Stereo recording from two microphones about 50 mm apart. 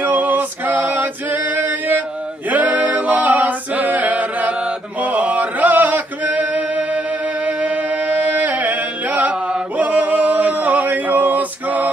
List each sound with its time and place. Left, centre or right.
0.0 s male singing: right
2.5 s a capella: right
5.0 s chant: right
7.4 s music: right
9.8 s male singing: right